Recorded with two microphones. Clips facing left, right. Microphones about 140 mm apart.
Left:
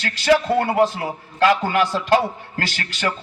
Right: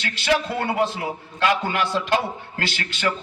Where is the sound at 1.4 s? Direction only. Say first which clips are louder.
Left 4 dB; 40° left (ahead or behind).